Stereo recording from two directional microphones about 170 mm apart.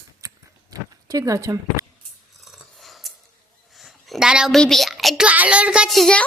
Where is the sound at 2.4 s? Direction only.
Centre (ahead or behind).